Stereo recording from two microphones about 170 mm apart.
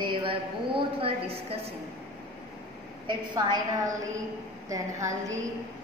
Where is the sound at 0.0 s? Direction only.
30° right (ahead or behind).